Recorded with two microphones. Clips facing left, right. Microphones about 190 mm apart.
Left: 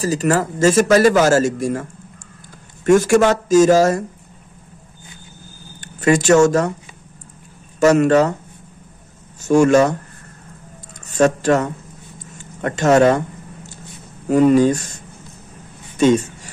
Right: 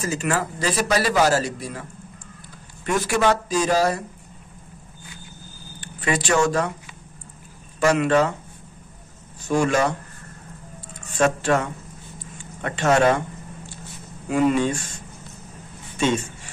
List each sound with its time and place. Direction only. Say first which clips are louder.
0.0 s speech: left 7 dB; 40° left (ahead or behind)
5.8 s speech: left 9 dB; 45° left (ahead or behind)
7.8 s speech: left 6 dB; 40° left (ahead or behind)
9.4 s speech: left 8 dB; 45° left (ahead or behind)
11.1 s speech: left 5 dB; 40° left (ahead or behind)
12.3 s a sound: left 6 dB; 45° left (ahead or behind)
14.2 s speech: left 7 dB; 40° left (ahead or behind)
16.0 s speech: left 8 dB; 40° left (ahead or behind)